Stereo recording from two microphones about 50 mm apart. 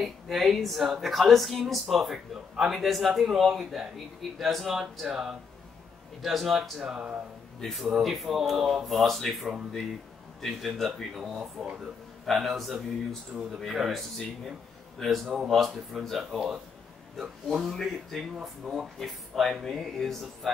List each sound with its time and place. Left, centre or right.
0.0 s speech: centre
6.8 s speech: centre
7.6 s speech: centre
11.1 s speech: centre
13.3 s speech: centre
15.2 s speech: centre
17.2 s speech: centre
17.6 s speech: centre